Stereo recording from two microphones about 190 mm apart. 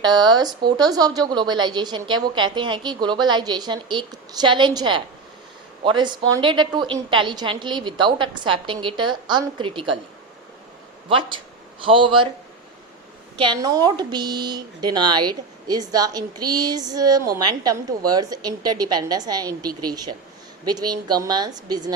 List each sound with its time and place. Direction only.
0.0 s a woman's voice: 20° right (ahead or behind)
11.1 s a woman's voice: 25° right (ahead or behind)
13.3 s a woman's voice: 25° right (ahead or behind)